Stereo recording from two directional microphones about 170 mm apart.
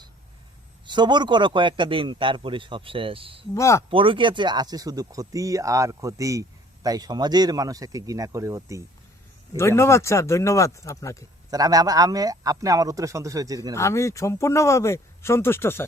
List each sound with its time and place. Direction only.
0.9 s a man's voice: 25° right (ahead or behind)
3.5 s speech: 15° left (ahead or behind)
3.8 s a man's voice: 30° right (ahead or behind)
9.6 s speech: 15° left (ahead or behind)
11.5 s a man's voice: 20° right (ahead or behind)
13.7 s speech: 15° left (ahead or behind)